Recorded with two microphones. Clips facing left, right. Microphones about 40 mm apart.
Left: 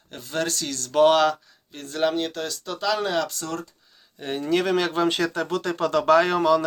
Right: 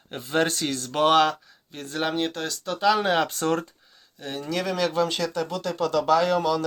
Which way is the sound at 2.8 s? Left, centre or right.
Centre.